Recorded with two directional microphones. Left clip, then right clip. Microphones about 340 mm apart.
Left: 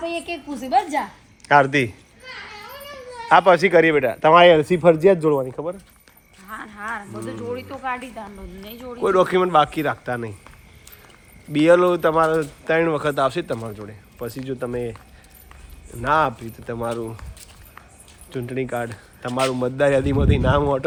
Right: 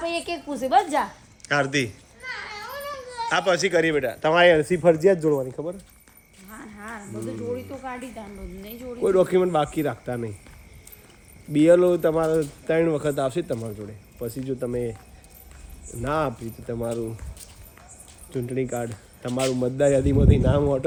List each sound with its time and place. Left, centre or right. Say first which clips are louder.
0.0 s a woman's voice: left 1 dB; centre
1.5 s speech: left 7 dB; centre
3.2 s speech: left 8 dB; centre
4.7 s speech: left 3 dB; left
5.1 s speech: left 3 dB; left
6.5 s speech: left 9 dB; centre
11.5 s speech: left 2 dB; centre
16.0 s speech: left 7 dB; centre
18.3 s speech: left 1 dB; centre